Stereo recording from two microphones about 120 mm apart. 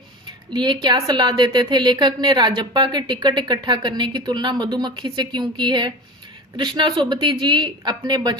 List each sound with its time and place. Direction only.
0.5 s a woman's voice: 40° right (ahead or behind)